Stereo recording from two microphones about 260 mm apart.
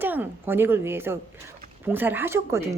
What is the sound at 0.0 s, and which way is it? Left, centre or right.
A woman's voice, centre.